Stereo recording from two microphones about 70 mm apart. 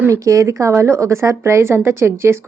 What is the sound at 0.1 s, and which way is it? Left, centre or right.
Speech, right.